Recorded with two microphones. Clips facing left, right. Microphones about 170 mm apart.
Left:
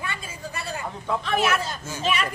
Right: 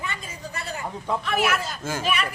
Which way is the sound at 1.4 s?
10° right (ahead or behind).